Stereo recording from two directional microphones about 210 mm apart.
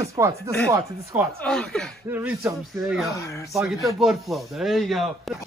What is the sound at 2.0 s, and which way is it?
Speech, 10° right (ahead or behind).